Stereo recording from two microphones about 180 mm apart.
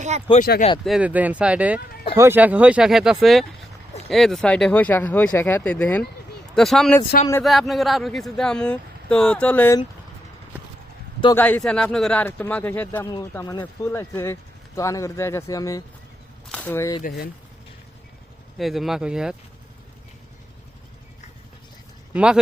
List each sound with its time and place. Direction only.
0.3 s speech: 60° left (ahead or behind)
0.9 s speech: 5° right (ahead or behind); by 9.7 s 10° left (ahead or behind)
11.3 s speech: 10° left (ahead or behind)
16.5 s speech: 10° left (ahead or behind)
17.0 s speech: 55° left (ahead or behind)
18.5 s speech: centre (ahead or behind)
22.1 s speech: 5° right (ahead or behind)